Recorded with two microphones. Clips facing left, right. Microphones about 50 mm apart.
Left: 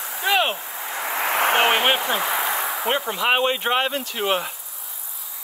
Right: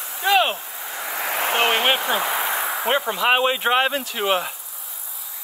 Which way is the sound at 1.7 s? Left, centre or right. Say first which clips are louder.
Even; centre.